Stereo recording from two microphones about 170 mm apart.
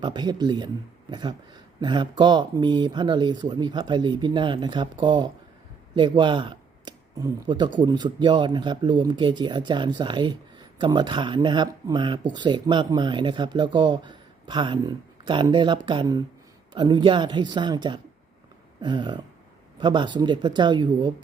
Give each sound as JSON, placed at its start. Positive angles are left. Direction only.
{"t": 0.0, "sound": "speech", "side_deg": -25}